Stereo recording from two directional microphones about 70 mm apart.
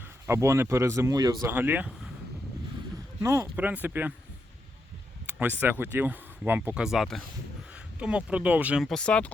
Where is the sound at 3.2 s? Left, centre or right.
Right.